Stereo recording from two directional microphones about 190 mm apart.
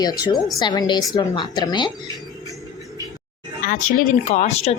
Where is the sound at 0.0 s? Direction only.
20° left (ahead or behind).